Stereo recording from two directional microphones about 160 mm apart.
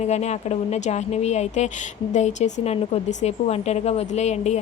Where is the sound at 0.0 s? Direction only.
45° left (ahead or behind).